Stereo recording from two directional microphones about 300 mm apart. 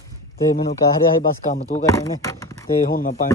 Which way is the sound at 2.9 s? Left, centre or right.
Left.